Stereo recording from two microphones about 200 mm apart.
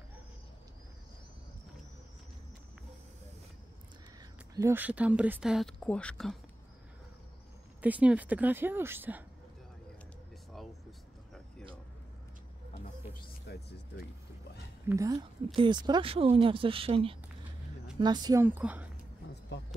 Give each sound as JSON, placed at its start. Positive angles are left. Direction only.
{"t": 4.6, "sound": "speech", "side_deg": -10}
{"t": 7.8, "sound": "speech", "side_deg": -5}
{"t": 12.7, "sound": "music", "side_deg": 35}
{"t": 13.5, "sound": "speech", "side_deg": 55}
{"t": 14.9, "sound": "speech", "side_deg": -15}